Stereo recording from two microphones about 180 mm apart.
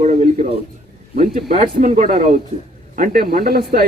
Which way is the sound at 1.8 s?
45° right (ahead or behind).